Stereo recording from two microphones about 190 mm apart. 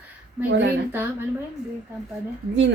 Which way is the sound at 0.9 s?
10° right (ahead or behind).